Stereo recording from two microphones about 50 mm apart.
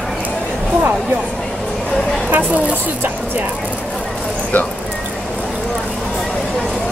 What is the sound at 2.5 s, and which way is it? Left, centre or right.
Speech, right.